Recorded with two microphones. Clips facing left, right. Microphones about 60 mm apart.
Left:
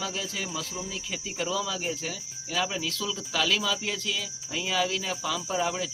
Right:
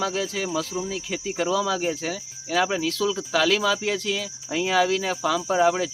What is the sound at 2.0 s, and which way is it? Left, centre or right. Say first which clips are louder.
Cricket: right 6 dB; right.